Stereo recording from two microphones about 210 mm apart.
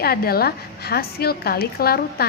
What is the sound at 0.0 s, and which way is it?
A woman's voice, 45° left (ahead or behind).